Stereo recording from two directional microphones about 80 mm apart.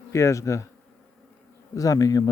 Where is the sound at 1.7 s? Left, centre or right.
Left.